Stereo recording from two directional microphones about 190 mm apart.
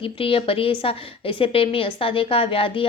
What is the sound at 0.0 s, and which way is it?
A woman's voice, 30° left (ahead or behind).